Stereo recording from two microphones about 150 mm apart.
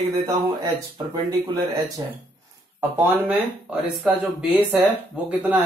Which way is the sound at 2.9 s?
10° right (ahead or behind).